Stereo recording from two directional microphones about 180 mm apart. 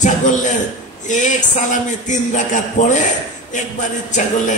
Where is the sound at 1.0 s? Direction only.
45° left (ahead or behind).